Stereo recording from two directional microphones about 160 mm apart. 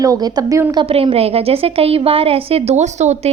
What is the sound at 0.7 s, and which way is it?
A woman's voice, 35° right (ahead or behind).